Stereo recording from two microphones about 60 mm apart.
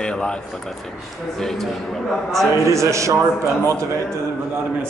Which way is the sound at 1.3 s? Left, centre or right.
Centre.